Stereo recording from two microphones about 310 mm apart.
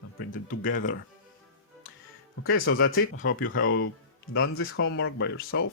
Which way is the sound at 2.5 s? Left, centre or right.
Left.